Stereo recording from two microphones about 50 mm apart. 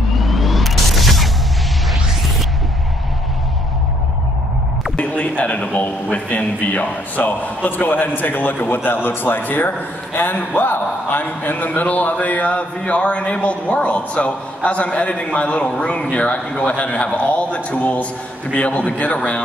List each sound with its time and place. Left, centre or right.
0.2 s vehicle: centre
4.9 s a man's voice: left